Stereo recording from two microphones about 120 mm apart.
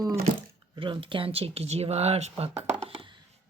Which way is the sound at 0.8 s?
45° right (ahead or behind).